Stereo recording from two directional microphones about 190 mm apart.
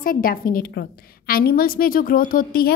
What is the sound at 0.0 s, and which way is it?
A woman's voice, 50° left (ahead or behind).